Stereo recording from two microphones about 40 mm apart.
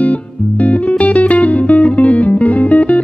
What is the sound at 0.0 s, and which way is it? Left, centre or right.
Music, left.